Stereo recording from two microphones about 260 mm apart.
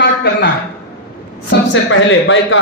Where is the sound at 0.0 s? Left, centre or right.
Left.